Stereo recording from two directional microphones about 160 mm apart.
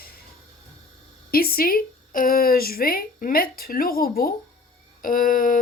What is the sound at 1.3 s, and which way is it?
A woman's voice, 70° left (ahead or behind).